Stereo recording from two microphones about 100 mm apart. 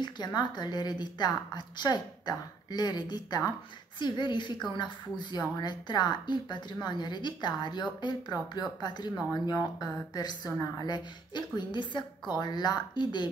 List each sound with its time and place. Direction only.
0.0 s a woman's voice: 45° left (ahead or behind)